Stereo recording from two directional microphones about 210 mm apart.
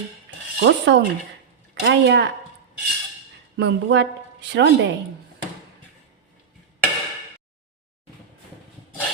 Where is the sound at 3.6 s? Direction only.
55° right (ahead or behind).